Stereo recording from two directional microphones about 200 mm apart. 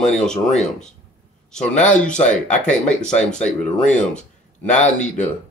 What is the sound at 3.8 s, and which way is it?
Speech, 35° left (ahead or behind).